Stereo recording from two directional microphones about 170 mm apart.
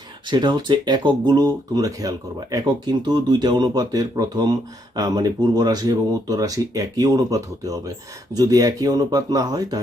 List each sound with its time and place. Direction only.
0.3 s speech: 25° right (ahead or behind)